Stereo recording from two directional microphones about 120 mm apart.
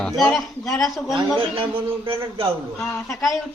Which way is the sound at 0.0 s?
5° left (ahead or behind).